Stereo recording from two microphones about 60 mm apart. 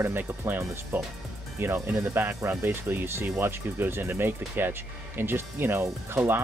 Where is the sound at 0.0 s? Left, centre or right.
Right.